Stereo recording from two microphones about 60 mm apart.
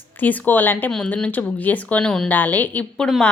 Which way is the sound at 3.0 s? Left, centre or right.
Centre.